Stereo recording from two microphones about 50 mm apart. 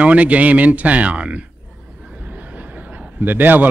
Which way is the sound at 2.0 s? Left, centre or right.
Centre.